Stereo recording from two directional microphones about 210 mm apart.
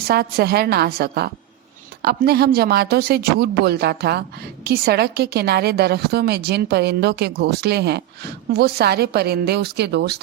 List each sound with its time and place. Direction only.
0.1 s a woman's voice: 50° right (ahead or behind)